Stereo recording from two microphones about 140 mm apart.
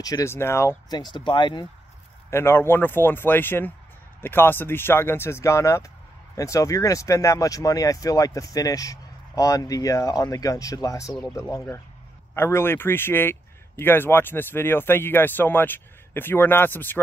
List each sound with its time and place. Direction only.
0.0 s speech: 25° left (ahead or behind)
0.8 s speech: 30° left (ahead or behind)
2.3 s speech: 20° left (ahead or behind)